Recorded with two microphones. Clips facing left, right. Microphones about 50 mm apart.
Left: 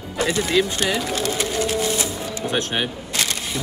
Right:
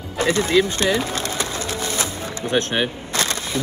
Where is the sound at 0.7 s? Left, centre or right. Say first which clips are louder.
Right 2 dB; right.